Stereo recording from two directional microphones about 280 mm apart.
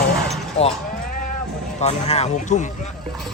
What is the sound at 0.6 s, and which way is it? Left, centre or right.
Sheep, left.